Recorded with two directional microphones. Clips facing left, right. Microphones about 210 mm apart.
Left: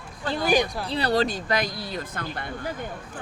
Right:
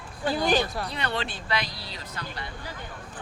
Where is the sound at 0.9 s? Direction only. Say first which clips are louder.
Left 8 dB; 35° left (ahead or behind); by 2.7 s 50° left (ahead or behind).